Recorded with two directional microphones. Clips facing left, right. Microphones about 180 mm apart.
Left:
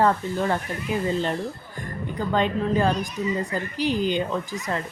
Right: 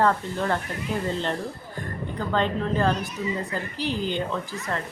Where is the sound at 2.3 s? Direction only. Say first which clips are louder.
Left 2 dB; 15° left (ahead or behind).